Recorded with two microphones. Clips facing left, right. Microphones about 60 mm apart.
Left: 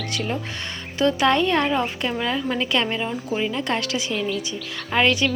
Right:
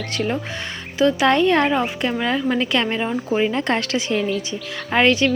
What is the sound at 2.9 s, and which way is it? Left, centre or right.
Speech, right.